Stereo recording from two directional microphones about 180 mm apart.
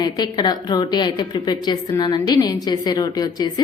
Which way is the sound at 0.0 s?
25° left (ahead or behind).